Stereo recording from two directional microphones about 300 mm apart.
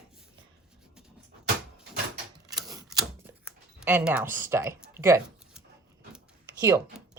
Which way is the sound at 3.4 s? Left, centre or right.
Centre.